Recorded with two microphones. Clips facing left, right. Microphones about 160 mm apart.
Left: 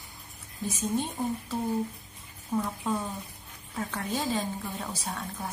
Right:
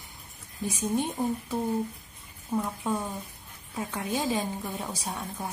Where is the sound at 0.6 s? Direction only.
15° right (ahead or behind).